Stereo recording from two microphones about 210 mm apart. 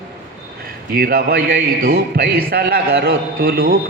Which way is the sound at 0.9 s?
45° right (ahead or behind).